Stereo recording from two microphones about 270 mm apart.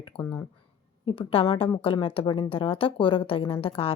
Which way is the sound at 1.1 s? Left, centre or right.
Centre.